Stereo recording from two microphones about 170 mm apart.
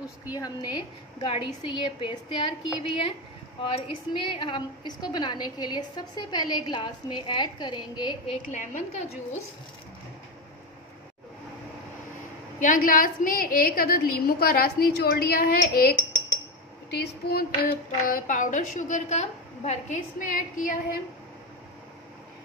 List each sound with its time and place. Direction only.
0.3 s a woman's voice: 25° left (ahead or behind)
8.5 s a woman's voice: 45° left (ahead or behind)
12.5 s a woman's voice: 50° left (ahead or behind)
16.9 s a woman's voice: 70° left (ahead or behind); by 20.8 s 50° left (ahead or behind)